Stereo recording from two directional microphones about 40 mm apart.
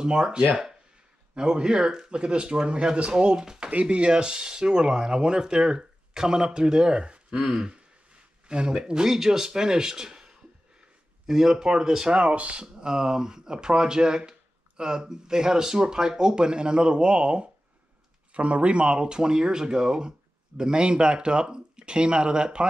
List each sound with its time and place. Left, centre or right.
0.0 s speech: right
8.5 s speech: right
12.1 s speech: right
12.8 s speech: centre